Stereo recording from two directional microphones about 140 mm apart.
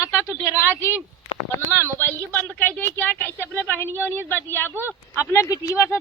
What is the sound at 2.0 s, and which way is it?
Speech, 15° left (ahead or behind).